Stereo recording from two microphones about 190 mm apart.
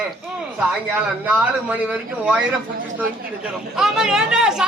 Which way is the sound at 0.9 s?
5° right (ahead or behind).